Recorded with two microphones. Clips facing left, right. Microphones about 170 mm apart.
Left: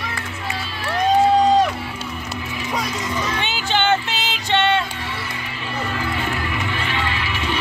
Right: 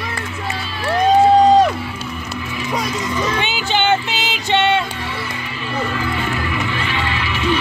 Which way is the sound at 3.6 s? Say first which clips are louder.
Right 1 dB; 10° right (ahead or behind).